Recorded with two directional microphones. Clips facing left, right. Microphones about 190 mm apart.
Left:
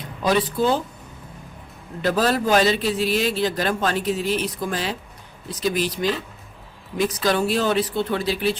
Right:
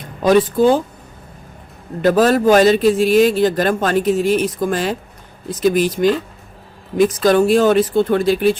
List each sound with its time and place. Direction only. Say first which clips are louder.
0.0 s speech: right 8 dB; 50° right (ahead or behind)
2.0 s a man's voice: right 7 dB; 50° right (ahead or behind)